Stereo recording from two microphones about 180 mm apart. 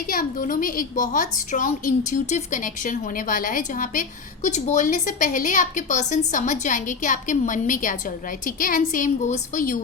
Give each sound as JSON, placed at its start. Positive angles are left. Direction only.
{"t": 0.1, "sound": "a woman's voice", "side_deg": 50}